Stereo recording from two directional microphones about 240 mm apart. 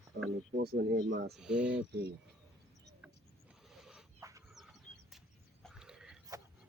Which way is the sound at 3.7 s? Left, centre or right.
Centre.